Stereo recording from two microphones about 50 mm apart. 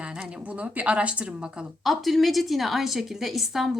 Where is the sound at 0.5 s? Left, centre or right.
Right.